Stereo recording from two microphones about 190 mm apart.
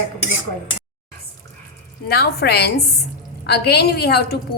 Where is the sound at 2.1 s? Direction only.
55° left (ahead or behind).